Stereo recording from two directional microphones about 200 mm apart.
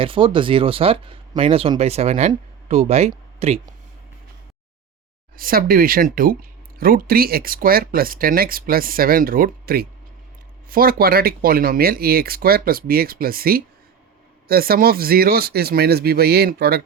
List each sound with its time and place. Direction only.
0.0 s speech: 25° right (ahead or behind)
5.4 s speech: 45° right (ahead or behind)